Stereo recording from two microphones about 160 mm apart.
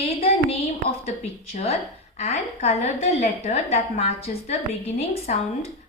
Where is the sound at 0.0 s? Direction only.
35° left (ahead or behind).